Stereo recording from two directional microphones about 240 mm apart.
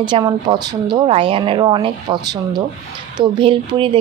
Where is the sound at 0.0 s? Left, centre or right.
Centre.